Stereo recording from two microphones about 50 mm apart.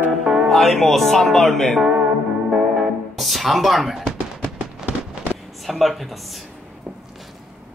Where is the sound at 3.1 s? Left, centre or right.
Centre.